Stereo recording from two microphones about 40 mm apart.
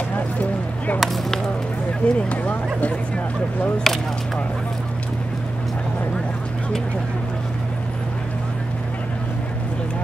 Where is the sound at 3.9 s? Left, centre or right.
Centre.